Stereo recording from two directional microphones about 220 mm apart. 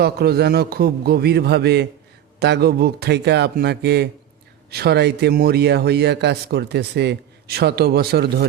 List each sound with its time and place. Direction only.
0.0 s a man's voice: 45° right (ahead or behind)